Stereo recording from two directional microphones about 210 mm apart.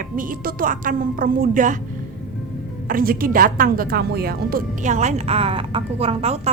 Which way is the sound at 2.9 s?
40° right (ahead or behind).